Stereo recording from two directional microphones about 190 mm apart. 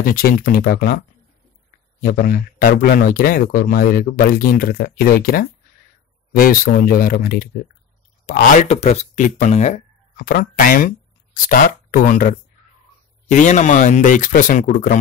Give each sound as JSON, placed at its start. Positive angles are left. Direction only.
{"t": 0.0, "sound": "speech", "side_deg": 50}
{"t": 8.3, "sound": "speech", "side_deg": 35}